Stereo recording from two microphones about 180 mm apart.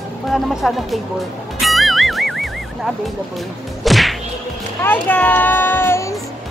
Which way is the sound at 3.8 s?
Centre (ahead or behind).